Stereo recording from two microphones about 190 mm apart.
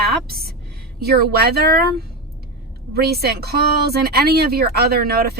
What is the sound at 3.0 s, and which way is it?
Speech, 55° right (ahead or behind).